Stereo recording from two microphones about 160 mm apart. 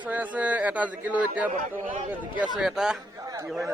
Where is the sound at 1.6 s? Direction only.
55° right (ahead or behind).